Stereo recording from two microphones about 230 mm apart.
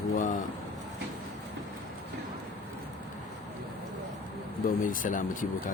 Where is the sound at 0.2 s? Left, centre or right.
Left.